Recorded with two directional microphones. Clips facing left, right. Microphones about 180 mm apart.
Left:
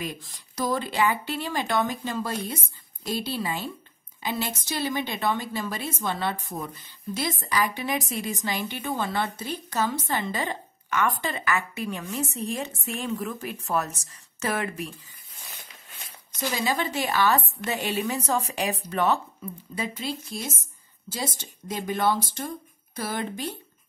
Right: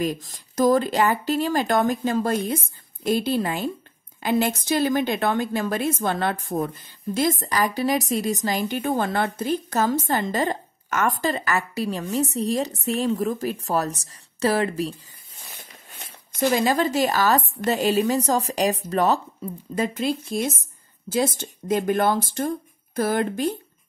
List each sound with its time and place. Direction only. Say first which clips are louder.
0.0 s a woman's voice: right 9 dB; 40° right (ahead or behind)
15.9 s a sound: right 3 dB; 55° right (ahead or behind)
16.7 s a woman's voice: right 5 dB; 40° right (ahead or behind)
19.7 s a woman's voice: right 8 dB; 50° right (ahead or behind)